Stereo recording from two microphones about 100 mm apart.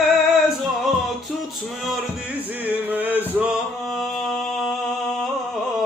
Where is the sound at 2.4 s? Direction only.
15° right (ahead or behind).